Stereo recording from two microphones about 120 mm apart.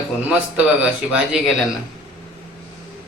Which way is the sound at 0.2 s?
10° right (ahead or behind).